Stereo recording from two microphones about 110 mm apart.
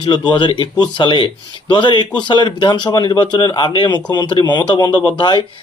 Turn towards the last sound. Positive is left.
turn(degrees=45)  # may be behind; listen again after turning